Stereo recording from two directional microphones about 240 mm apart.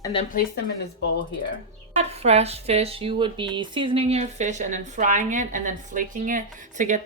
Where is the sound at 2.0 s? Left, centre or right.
Right.